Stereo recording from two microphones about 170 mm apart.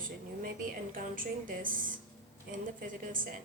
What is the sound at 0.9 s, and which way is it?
Speech, 55° right (ahead or behind).